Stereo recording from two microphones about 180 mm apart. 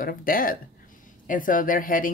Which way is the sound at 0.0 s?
50° left (ahead or behind).